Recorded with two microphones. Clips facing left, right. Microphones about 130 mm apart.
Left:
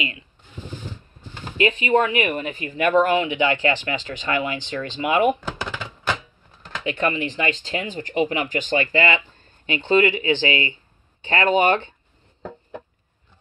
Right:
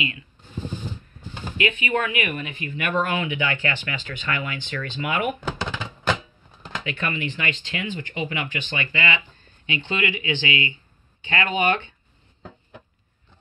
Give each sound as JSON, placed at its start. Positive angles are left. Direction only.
{"t": 1.6, "sound": "speech", "side_deg": 35}
{"t": 6.8, "sound": "speech", "side_deg": 30}